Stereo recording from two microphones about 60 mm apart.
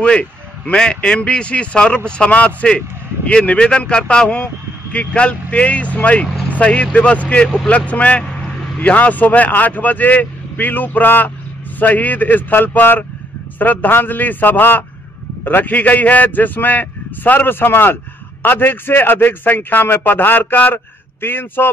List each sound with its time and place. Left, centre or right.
0.0 s a man's voice: centre; by 21.6 s left